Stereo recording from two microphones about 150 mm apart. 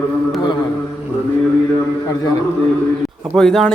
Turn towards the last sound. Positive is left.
turn(degrees=0)  # may be behind; listen again after turning